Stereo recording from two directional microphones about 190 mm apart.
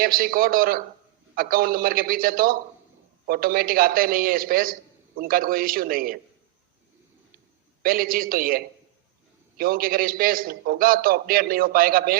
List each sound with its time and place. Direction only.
0.0 s a man's voice: 50° right (ahead or behind)
7.8 s a man's voice: 50° right (ahead or behind)